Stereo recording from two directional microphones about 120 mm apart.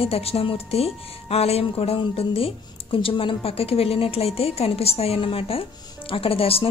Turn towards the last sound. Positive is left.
turn(degrees=50)  # may be behind; listen again after turning